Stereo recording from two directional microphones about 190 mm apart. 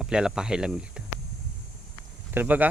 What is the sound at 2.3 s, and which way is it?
Speech, 10° right (ahead or behind).